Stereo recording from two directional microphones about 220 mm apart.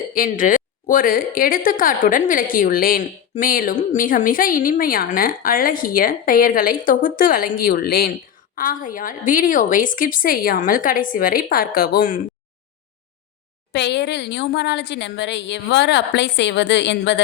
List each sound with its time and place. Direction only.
0.1 s a woman's voice: 40° left (ahead or behind)
13.7 s a woman's voice: 50° left (ahead or behind)